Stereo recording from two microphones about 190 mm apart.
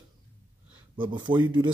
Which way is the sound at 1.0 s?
25° right (ahead or behind).